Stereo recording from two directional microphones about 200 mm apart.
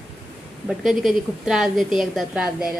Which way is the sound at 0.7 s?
Centre (ahead or behind).